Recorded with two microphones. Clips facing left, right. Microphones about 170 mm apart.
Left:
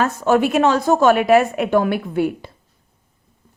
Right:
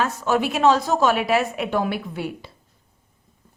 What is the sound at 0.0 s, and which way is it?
A woman's voice, 50° left (ahead or behind).